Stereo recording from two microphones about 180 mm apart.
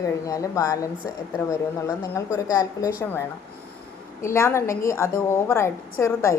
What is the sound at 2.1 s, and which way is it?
Speech, 20° left (ahead or behind).